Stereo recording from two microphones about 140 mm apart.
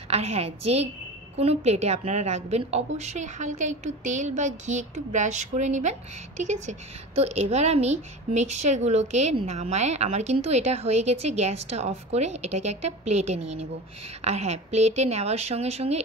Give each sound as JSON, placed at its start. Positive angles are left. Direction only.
{"t": 0.1, "sound": "a woman's voice", "side_deg": -50}